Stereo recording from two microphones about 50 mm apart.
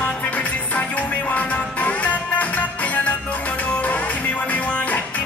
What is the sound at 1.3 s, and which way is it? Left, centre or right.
Music, left.